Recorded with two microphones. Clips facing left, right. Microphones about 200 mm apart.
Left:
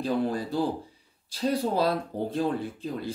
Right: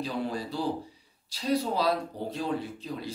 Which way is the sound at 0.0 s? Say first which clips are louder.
Left 5 dB; 50° left (ahead or behind).